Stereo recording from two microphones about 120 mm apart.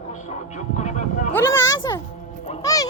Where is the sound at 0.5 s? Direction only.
80° left.